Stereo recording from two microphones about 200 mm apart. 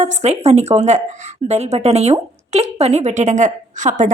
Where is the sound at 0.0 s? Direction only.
35° right (ahead or behind).